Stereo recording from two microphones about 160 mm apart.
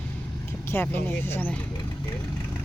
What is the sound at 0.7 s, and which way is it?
Speech, 15° left (ahead or behind).